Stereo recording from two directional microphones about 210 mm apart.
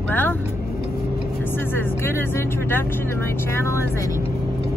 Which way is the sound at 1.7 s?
10° left (ahead or behind).